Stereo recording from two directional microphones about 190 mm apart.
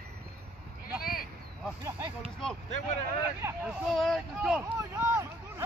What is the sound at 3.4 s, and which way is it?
Speech, 5° right (ahead or behind).